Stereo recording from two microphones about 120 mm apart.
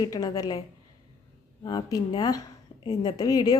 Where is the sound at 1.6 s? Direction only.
35° left (ahead or behind).